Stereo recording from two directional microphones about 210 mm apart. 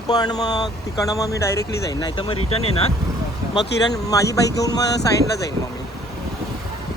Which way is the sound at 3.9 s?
15° left (ahead or behind).